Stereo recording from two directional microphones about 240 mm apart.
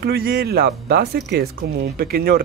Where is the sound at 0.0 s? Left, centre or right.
Right.